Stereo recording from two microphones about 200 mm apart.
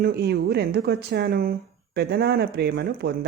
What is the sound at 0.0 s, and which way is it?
Speech, 50° right (ahead or behind).